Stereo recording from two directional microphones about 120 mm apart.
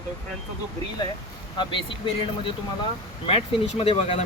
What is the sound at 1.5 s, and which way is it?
Speech, 45° left (ahead or behind).